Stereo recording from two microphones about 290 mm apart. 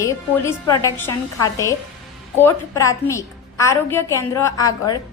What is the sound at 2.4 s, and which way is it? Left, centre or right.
A woman's voice, centre.